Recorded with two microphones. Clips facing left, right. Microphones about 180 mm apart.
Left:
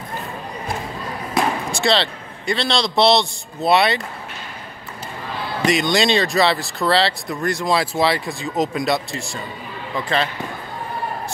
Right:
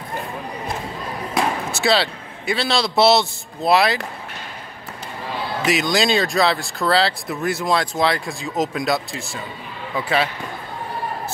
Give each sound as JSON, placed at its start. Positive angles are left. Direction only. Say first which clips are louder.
{"t": 1.3, "sound": "speech", "louder": "left 1 dB", "side_deg": -5}
{"t": 5.7, "sound": "speech", "louder": "left 1 dB", "side_deg": 0}